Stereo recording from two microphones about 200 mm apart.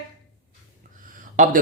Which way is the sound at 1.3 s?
40° right (ahead or behind).